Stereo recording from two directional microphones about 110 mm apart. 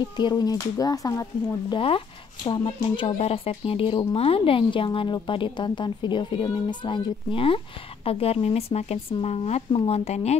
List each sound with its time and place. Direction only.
0.2 s speech: 40° left (ahead or behind)
1.7 s speech: 55° left (ahead or behind)
3.2 s speech: 65° left (ahead or behind)
9.7 s speech: 60° left (ahead or behind); by 10.3 s 80° left